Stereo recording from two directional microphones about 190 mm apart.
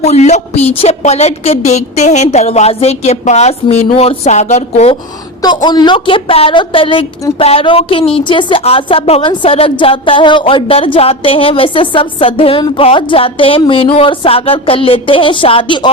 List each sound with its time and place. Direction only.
0.0 s a woman's voice: 35° left (ahead or behind)
5.4 s a woman's voice: 20° left (ahead or behind)